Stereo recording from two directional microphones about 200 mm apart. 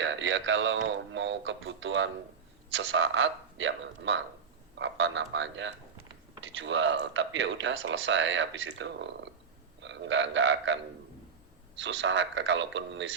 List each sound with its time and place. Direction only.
0.0 s speech: 65° right (ahead or behind)
9.8 s a sound: 65° right (ahead or behind)
11.8 s speech: 70° right (ahead or behind)